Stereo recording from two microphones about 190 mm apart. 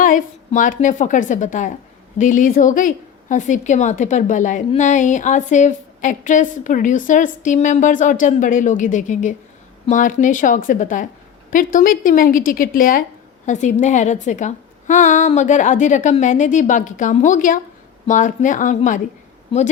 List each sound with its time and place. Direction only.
0.0 s a woman's voice: 45° left (ahead or behind)